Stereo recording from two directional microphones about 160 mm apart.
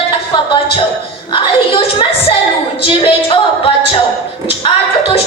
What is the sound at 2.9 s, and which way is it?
Speech, 35° left (ahead or behind).